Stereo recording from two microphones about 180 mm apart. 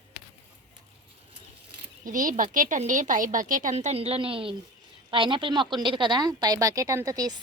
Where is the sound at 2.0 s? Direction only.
45° right (ahead or behind); by 7.4 s 20° right (ahead or behind).